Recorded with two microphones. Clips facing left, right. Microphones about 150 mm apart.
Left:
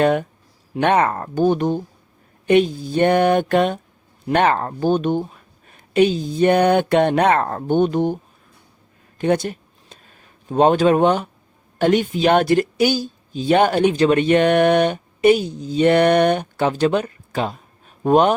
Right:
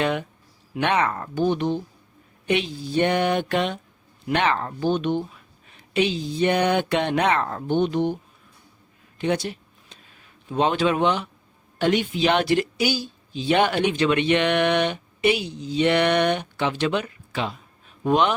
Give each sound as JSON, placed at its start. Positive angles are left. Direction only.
{"t": 0.0, "sound": "speech", "side_deg": 45}
{"t": 9.1, "sound": "a sound", "side_deg": 50}
{"t": 11.8, "sound": "speech", "side_deg": 45}